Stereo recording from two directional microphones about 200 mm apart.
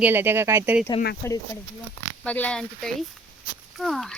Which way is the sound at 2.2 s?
5° left (ahead or behind).